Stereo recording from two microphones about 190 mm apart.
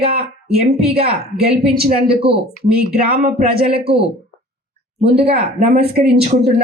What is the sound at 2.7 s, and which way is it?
Speech, 55° right (ahead or behind).